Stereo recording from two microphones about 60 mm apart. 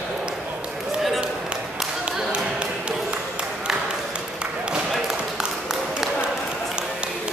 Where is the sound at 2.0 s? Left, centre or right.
Centre.